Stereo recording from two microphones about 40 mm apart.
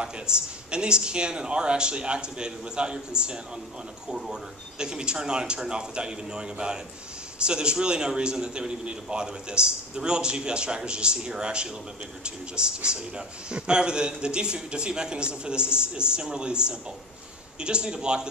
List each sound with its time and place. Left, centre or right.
0.0 s speech: right